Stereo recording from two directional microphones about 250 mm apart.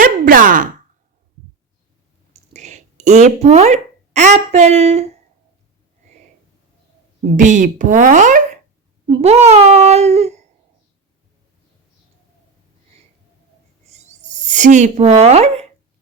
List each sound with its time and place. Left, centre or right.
0.0 s sigh: right
2.3 s speech: right
7.3 s speech: right
13.9 s a sound: right